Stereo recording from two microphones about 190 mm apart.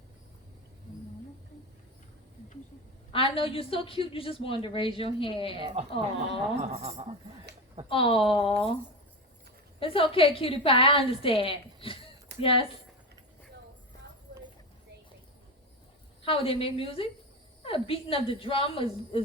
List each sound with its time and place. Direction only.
3.1 s a woman's voice: 30° left (ahead or behind)
5.8 s speech: 35° right (ahead or behind)
7.9 s a woman's voice: 30° left (ahead or behind)
9.8 s a woman's voice: 30° left (ahead or behind)
16.2 s a woman's voice: 30° left (ahead or behind)